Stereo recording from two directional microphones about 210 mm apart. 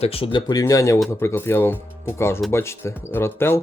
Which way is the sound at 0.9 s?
Centre (ahead or behind).